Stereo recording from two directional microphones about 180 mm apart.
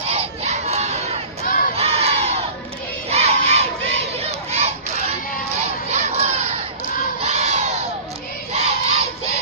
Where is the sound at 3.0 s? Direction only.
35° right (ahead or behind).